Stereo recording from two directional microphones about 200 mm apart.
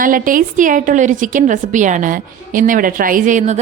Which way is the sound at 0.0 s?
45° right (ahead or behind).